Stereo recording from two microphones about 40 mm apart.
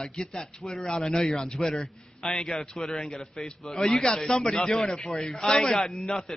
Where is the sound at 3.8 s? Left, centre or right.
Centre.